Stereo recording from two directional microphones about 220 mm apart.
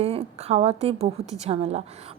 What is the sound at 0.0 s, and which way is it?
A woman's voice, 25° right (ahead or behind).